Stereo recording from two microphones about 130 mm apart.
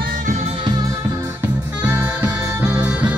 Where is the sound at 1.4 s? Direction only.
15° right (ahead or behind).